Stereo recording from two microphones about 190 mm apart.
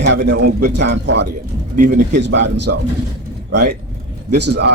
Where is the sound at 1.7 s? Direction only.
45° right (ahead or behind).